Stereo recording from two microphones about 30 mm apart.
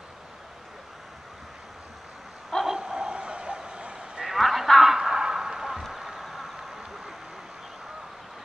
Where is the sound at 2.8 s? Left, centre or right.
Right.